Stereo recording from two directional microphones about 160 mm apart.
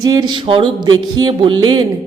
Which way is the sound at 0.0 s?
25° right (ahead or behind).